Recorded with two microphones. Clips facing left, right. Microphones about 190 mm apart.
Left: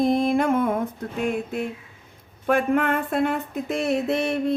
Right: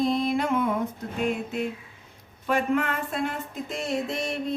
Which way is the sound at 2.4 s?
50° left (ahead or behind).